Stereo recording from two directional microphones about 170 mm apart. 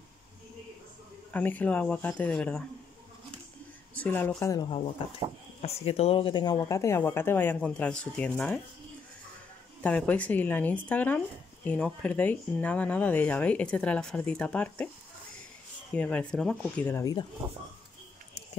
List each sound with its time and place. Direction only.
1.3 s speech: 10° left (ahead or behind)
3.9 s speech: 10° left (ahead or behind)
5.6 s speech: 35° left (ahead or behind); by 8.5 s 5° left (ahead or behind)
9.8 s speech: 10° left (ahead or behind)
15.9 s speech: 5° left (ahead or behind)